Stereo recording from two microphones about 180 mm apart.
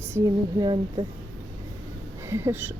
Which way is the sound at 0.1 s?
20° right (ahead or behind).